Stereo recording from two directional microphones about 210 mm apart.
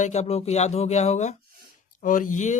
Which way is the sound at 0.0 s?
30° left (ahead or behind).